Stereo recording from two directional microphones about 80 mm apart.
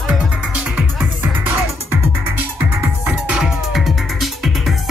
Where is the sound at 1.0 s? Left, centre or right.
Right.